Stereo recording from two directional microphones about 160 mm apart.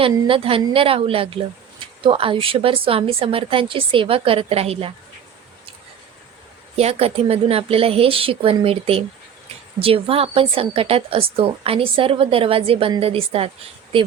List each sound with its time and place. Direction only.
0.0 s a woman's voice: 35° right (ahead or behind)
6.7 s a woman's voice: 40° right (ahead or behind)